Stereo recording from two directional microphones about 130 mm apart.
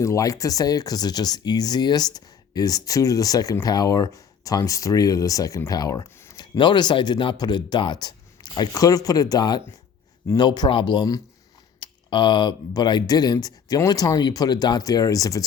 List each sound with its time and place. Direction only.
0.0 s speech: 25° left (ahead or behind)